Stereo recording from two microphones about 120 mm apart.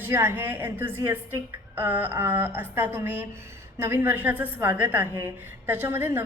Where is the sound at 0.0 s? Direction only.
15° right (ahead or behind).